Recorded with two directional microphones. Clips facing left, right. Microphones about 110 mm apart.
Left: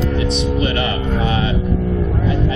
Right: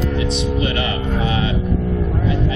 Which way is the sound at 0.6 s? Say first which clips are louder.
Left 2 dB; 40° left (ahead or behind).